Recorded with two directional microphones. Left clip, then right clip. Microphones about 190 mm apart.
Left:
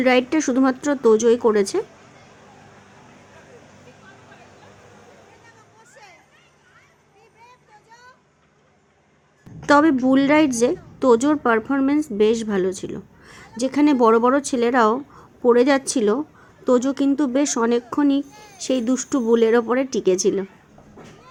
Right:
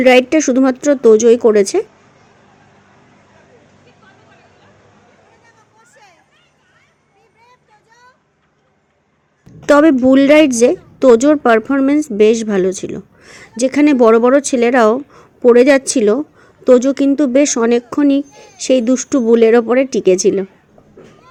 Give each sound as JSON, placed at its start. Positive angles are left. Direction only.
{"t": 0.0, "sound": "speech", "side_deg": -25}
{"t": 7.4, "sound": "child singing", "side_deg": -5}
{"t": 9.6, "sound": "speech", "side_deg": -25}